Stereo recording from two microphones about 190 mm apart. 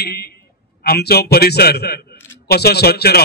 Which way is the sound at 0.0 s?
55° left (ahead or behind).